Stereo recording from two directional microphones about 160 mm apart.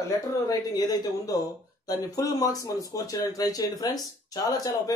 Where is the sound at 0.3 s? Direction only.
20° left (ahead or behind).